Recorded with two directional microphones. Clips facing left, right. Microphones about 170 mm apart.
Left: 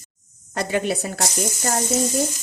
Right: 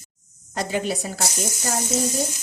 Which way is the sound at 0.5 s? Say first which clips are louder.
Left 2 dB; 65° left (ahead or behind).